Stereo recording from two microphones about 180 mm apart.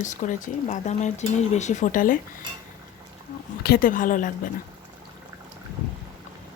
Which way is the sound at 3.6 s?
55° left (ahead or behind).